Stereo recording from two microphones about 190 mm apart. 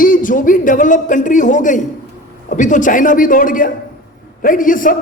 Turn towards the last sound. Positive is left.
turn(degrees=45)  # may be behind; listen again after turning